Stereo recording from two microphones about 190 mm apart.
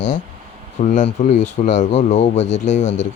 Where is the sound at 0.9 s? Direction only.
35° left (ahead or behind).